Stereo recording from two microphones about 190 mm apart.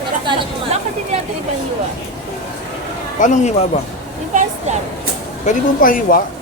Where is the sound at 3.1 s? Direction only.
40° left (ahead or behind).